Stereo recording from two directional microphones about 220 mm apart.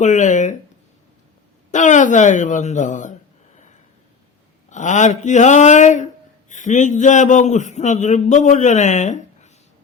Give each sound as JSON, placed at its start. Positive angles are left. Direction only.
{"t": 0.0, "sound": "a man's voice", "side_deg": 35}
{"t": 1.7, "sound": "a woman's voice", "side_deg": 35}
{"t": 4.7, "sound": "a man's voice", "side_deg": 35}